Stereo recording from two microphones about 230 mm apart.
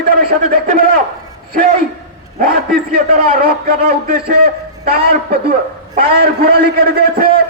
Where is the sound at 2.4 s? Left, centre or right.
Right.